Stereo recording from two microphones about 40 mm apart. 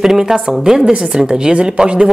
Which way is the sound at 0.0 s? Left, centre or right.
Centre.